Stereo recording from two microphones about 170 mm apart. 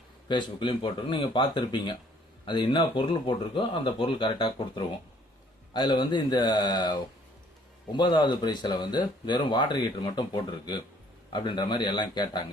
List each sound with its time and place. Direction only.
0.3 s speech: 25° left (ahead or behind)
11.3 s speech: 25° left (ahead or behind)